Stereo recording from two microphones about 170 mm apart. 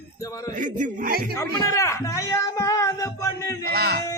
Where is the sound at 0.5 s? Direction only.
45° right (ahead or behind).